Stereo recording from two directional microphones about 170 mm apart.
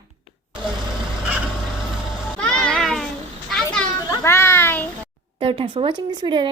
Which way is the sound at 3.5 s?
5° left (ahead or behind).